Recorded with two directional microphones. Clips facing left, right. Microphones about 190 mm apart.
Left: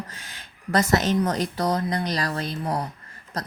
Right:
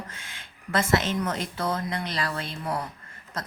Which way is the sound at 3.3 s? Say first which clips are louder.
Left 3 dB; 40° left (ahead or behind).